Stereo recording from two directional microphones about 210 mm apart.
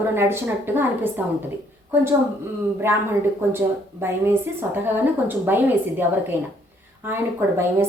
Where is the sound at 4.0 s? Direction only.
10° right (ahead or behind).